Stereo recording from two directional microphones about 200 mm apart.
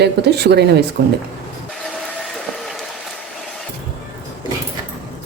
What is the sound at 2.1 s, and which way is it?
Vehicle, centre (ahead or behind).